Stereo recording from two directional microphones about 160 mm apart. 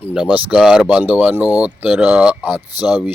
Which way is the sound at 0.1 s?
5° right (ahead or behind).